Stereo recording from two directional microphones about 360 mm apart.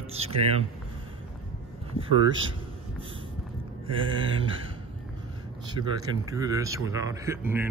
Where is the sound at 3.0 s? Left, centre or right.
Centre.